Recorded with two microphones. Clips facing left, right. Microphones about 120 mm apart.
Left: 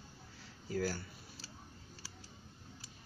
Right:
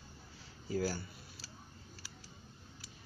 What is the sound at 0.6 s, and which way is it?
Speech, 15° right (ahead or behind).